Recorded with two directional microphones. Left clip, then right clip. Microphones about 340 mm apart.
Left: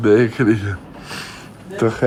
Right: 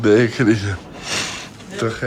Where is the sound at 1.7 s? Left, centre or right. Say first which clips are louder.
Left 5 dB; centre.